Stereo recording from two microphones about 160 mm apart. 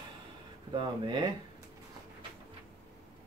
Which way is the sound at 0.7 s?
30° right (ahead or behind).